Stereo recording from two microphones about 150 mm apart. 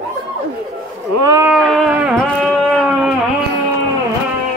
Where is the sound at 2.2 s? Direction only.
5° left (ahead or behind).